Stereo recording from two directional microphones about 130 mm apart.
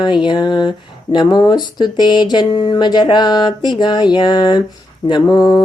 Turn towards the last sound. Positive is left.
turn(degrees=30)  # may be behind; listen again after turning